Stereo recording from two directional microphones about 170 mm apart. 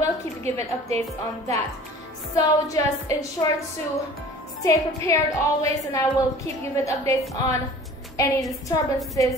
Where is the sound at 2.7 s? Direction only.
20° left (ahead or behind).